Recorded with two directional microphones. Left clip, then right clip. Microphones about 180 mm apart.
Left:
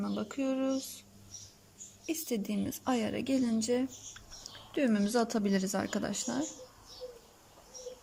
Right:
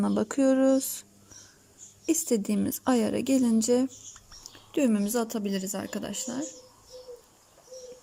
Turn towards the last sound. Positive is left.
turn(degrees=-10)  # may be behind; listen again after turning